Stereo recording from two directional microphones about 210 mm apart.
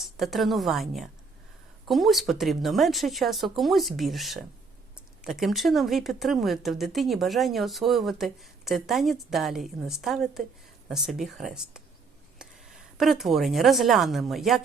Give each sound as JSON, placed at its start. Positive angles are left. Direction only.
{"t": 0.2, "sound": "speech", "side_deg": 0}